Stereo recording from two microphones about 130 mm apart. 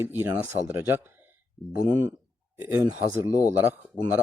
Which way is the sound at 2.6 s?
15° right (ahead or behind).